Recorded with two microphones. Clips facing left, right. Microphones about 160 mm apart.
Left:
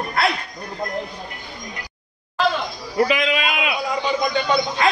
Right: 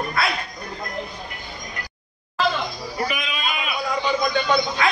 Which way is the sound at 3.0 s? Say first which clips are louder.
Left 9 dB; 90° left.